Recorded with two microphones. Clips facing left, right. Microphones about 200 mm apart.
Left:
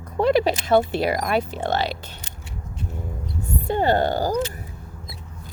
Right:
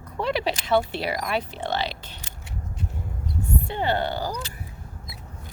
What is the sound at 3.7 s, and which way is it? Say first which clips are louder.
Speech: left 7 dB; 45° left (ahead or behind).